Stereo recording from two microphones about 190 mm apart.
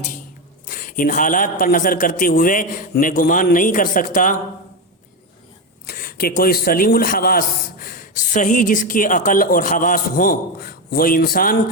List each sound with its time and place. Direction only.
0.7 s a man's voice: 45° left (ahead or behind)
5.8 s a man's voice: 50° left (ahead or behind)